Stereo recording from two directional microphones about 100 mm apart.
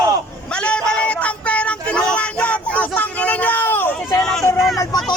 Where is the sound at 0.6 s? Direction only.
10° left (ahead or behind).